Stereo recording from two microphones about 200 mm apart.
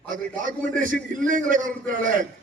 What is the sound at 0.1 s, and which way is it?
A man's voice, 40° right (ahead or behind).